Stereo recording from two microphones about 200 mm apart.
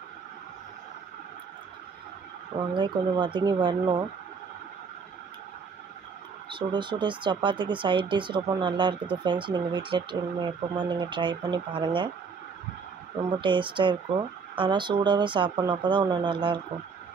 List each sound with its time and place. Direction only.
2.8 s speech: 25° right (ahead or behind)
6.5 s speech: 25° right (ahead or behind)
13.3 s speech: 25° right (ahead or behind)